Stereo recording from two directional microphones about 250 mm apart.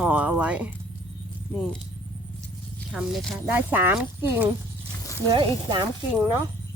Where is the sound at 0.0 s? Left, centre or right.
Centre.